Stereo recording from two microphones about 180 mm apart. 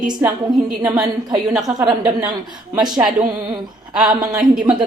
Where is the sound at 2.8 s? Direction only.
25° right (ahead or behind).